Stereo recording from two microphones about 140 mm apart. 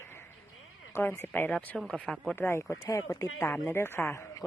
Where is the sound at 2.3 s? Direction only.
15° left (ahead or behind).